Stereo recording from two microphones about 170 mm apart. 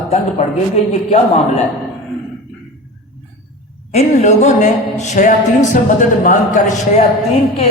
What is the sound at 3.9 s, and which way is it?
A man's voice, 45° left (ahead or behind).